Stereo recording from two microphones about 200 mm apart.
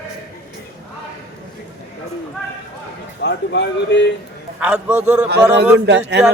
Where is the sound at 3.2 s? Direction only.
60° left (ahead or behind).